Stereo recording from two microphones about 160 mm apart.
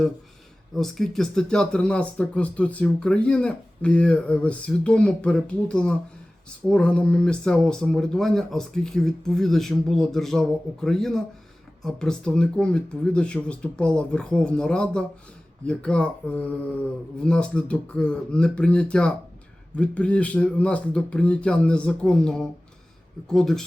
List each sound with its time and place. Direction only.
0.7 s speech: centre (ahead or behind)